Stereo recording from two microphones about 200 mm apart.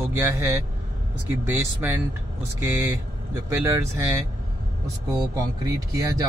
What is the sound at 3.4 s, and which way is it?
Speech, 15° right (ahead or behind).